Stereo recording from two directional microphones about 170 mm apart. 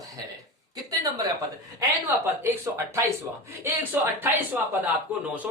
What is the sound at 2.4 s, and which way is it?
Speech, 15° right (ahead or behind).